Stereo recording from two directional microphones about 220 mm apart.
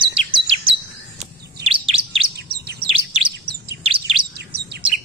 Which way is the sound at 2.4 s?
45° right (ahead or behind).